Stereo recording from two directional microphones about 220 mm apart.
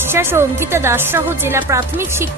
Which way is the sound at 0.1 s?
10° right (ahead or behind).